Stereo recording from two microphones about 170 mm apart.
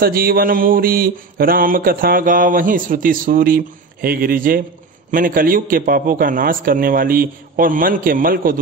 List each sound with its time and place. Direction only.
0.0 s mantra: 60° right (ahead or behind)